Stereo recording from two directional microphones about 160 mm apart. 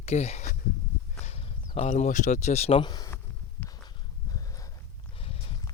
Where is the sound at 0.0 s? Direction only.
40° left (ahead or behind).